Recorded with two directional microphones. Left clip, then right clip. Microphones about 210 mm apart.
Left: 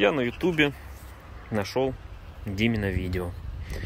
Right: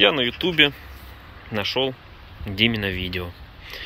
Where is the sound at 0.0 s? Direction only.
20° left (ahead or behind).